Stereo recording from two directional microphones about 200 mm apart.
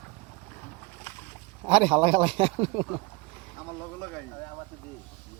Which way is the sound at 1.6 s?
25° right (ahead or behind).